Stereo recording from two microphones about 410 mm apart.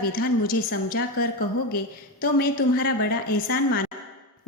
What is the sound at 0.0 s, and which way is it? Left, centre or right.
A woman's voice, left.